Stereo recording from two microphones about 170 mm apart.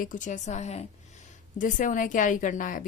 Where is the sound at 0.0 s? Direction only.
50° left (ahead or behind).